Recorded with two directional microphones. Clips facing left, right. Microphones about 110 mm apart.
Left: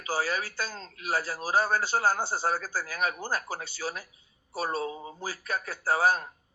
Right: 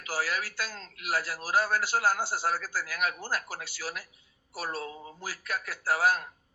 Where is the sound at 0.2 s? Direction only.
25° left (ahead or behind).